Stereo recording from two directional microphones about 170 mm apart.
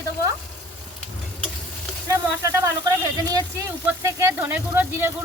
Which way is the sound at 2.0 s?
15° right (ahead or behind).